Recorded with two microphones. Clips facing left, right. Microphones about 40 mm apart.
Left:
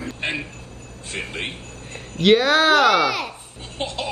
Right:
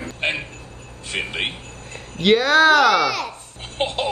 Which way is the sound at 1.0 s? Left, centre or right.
Right.